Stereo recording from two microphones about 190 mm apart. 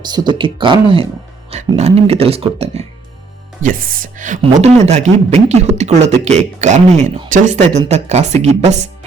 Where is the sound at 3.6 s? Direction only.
50° right (ahead or behind).